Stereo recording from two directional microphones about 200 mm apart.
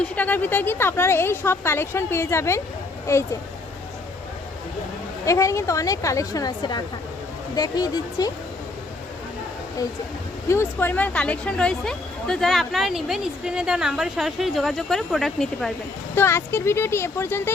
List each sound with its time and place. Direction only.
0.0 s a woman's voice: 10° left (ahead or behind)
5.2 s a woman's voice: 15° left (ahead or behind)
10.5 s speech: 10° left (ahead or behind)
16.1 s a woman's voice: 10° left (ahead or behind)